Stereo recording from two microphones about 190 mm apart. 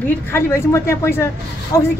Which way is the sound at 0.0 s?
10° left (ahead or behind).